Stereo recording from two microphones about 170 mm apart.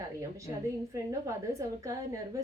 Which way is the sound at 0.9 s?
20° right (ahead or behind).